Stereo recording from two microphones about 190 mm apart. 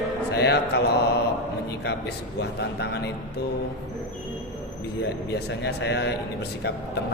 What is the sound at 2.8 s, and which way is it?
Speech, 60° left (ahead or behind).